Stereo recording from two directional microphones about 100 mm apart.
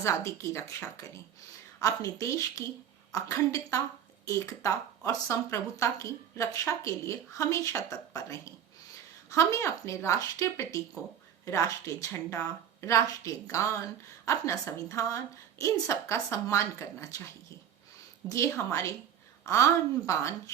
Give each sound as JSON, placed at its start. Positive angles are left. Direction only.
{"t": 0.0, "sound": "a woman's voice", "side_deg": 30}
{"t": 18.3, "sound": "a woman's voice", "side_deg": 25}